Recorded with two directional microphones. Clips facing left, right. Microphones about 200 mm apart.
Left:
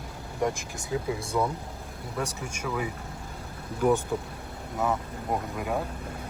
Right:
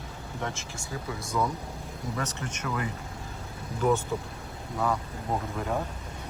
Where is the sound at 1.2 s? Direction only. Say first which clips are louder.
Left 2 dB; 30° left (ahead or behind).